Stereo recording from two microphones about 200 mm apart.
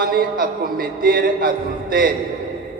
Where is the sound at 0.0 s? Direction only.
45° right (ahead or behind).